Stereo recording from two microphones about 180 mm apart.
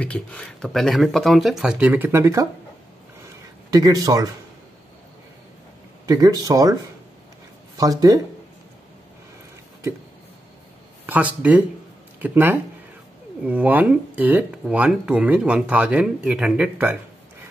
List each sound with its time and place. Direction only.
0.0 s speech: 5° left (ahead or behind); by 2.4 s 15° right (ahead or behind)
3.7 s speech: 20° right (ahead or behind)
6.0 s speech: 20° right (ahead or behind)
11.1 s speech: 10° right (ahead or behind)